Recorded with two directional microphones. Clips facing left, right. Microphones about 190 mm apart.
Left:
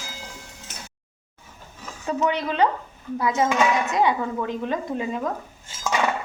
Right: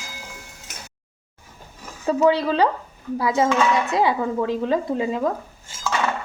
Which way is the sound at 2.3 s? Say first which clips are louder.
Right 2 dB; 35° right (ahead or behind).